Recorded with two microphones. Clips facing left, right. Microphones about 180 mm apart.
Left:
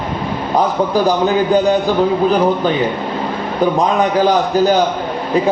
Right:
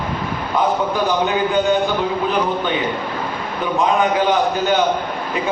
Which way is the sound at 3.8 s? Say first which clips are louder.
Even; 35° left (ahead or behind).